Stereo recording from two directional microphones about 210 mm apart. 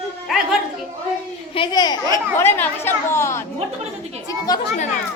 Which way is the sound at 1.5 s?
20° left (ahead or behind).